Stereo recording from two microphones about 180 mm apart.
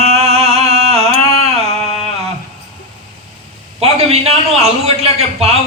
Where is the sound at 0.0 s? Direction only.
35° right (ahead or behind).